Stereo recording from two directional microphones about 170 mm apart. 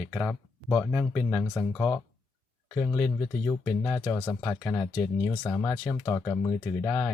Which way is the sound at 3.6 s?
5° left (ahead or behind).